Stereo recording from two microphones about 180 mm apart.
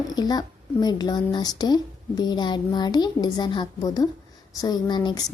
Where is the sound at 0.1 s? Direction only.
20° left (ahead or behind).